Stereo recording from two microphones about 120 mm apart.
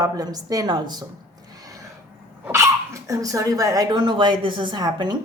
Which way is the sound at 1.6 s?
30° right (ahead or behind).